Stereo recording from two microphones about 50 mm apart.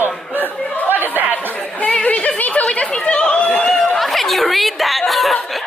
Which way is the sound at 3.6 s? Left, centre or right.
Centre.